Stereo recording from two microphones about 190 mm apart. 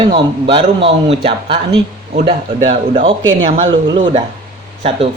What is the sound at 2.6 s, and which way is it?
Speech, 30° right (ahead or behind).